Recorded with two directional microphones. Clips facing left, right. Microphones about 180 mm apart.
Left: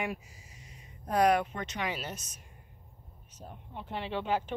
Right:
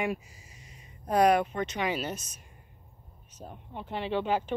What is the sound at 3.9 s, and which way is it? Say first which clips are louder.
Speech: right 3 dB; 5° right (ahead or behind).